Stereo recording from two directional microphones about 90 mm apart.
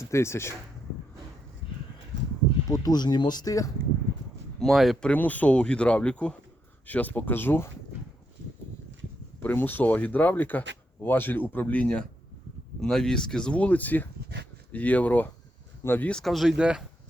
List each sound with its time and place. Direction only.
0.0 s speech: 30° left (ahead or behind)
1.6 s a sound: 75° left (ahead or behind)
2.6 s speech: 40° left (ahead or behind)
4.6 s speech: centre (ahead or behind)
5.0 s speech: 20° left (ahead or behind)
9.4 s speech: 20° left (ahead or behind)
16.0 s speech: 5° left (ahead or behind)